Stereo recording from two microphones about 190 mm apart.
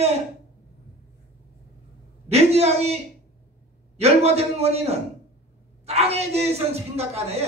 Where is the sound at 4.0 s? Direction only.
35° right (ahead or behind).